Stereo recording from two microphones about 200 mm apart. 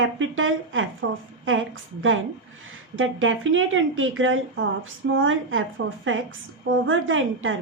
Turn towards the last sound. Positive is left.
turn(degrees=-75)  # may be behind; listen again after turning